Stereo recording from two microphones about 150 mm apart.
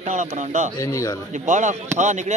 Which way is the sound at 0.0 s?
50° right (ahead or behind).